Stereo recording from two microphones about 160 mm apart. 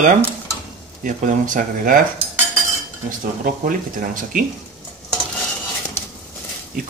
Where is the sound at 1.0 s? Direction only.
55° right (ahead or behind).